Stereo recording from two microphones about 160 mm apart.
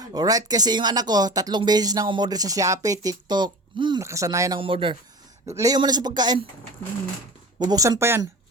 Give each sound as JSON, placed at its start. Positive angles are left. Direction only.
{"t": 0.0, "sound": "speech", "side_deg": -25}
{"t": 4.6, "sound": "speech", "side_deg": -35}
{"t": 5.5, "sound": "speech", "side_deg": -20}
{"t": 7.6, "sound": "speech", "side_deg": -25}